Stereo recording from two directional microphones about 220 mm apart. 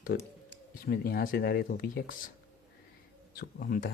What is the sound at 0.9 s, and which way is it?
Speech, 40° left (ahead or behind).